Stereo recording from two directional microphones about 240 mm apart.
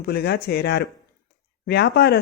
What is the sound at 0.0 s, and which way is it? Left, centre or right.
Speech, left.